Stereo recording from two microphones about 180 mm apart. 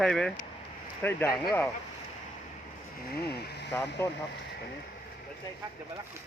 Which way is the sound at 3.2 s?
60° left (ahead or behind).